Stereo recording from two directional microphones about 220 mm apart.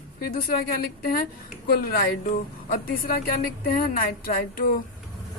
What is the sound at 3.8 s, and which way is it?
Speech, 40° left (ahead or behind).